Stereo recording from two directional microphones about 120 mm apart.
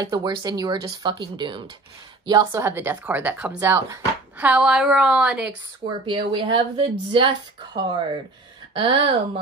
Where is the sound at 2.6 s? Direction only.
20° right (ahead or behind).